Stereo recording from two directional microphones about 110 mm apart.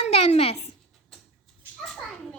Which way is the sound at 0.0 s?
75° left (ahead or behind).